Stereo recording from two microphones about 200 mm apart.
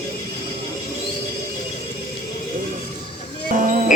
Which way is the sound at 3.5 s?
40° right (ahead or behind).